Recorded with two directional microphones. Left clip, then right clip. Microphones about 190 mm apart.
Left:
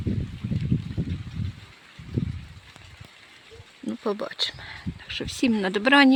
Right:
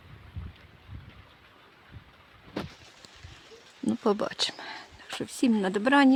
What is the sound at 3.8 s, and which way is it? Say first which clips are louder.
Speech: right 2 dB; 20° right (ahead or behind).